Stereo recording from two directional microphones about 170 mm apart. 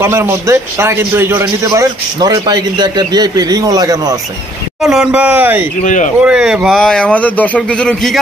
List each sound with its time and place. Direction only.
0.0 s a man's voice: 15° right (ahead or behind)
4.8 s speech: 5° right (ahead or behind)